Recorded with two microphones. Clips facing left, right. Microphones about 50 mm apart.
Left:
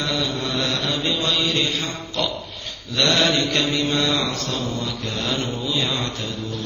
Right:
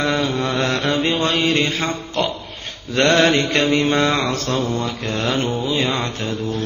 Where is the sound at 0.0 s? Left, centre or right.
Right.